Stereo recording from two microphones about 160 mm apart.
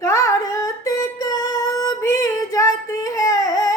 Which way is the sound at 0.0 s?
20° left (ahead or behind).